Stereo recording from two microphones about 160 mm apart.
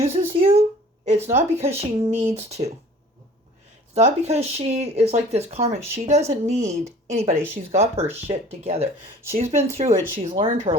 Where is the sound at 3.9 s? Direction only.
40° right (ahead or behind).